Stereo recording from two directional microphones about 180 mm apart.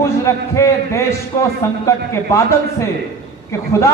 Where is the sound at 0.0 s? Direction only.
15° left (ahead or behind).